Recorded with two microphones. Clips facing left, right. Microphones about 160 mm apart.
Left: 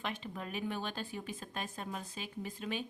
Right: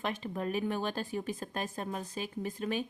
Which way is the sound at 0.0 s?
45° right (ahead or behind).